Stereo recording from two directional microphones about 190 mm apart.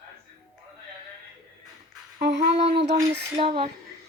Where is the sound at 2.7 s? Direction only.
30° right (ahead or behind).